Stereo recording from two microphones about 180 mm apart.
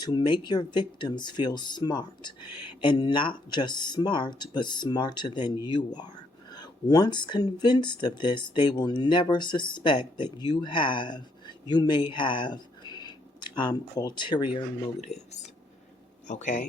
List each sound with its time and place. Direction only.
0.0 s a man's voice: 25° left (ahead or behind); by 16.6 s 45° left (ahead or behind)